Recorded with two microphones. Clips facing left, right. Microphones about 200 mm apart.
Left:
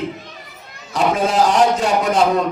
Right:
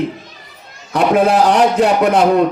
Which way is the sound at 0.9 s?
60° right (ahead or behind).